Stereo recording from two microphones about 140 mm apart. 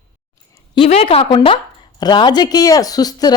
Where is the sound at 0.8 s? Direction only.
45° left (ahead or behind).